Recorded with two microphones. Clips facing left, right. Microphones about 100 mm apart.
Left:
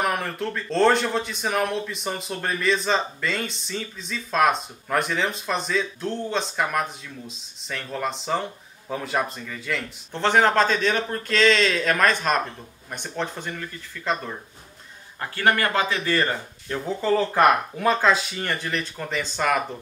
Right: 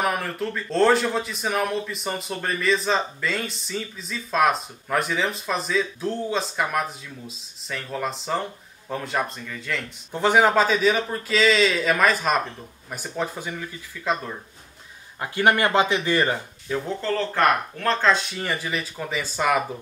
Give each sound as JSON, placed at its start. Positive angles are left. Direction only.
{"t": 0.0, "sound": "a man's voice", "side_deg": 0}
{"t": 10.1, "sound": "a man's voice", "side_deg": -10}
{"t": 15.1, "sound": "speech", "side_deg": -15}
{"t": 16.6, "sound": "a man's voice", "side_deg": 0}